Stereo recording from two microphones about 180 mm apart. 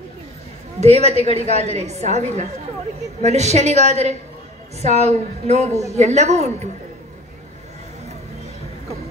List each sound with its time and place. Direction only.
0.7 s a woman's voice: 35° right (ahead or behind)